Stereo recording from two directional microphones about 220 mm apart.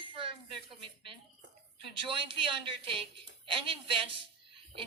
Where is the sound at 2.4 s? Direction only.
25° right (ahead or behind).